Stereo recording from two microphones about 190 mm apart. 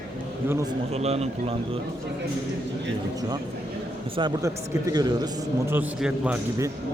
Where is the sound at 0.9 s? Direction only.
35° right (ahead or behind).